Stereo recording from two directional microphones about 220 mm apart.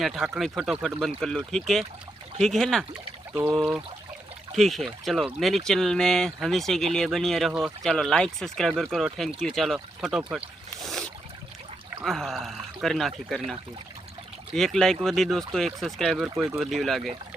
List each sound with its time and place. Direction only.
0.0 s speech: centre (ahead or behind)
10.8 s boat: centre (ahead or behind)
12.0 s speech: centre (ahead or behind)